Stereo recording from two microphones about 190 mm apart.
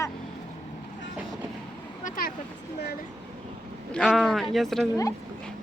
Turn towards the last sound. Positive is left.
turn(degrees=0)  # may be behind; listen again after turning